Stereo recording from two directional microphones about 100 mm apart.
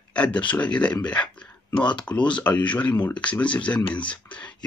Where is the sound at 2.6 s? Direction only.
15° left (ahead or behind).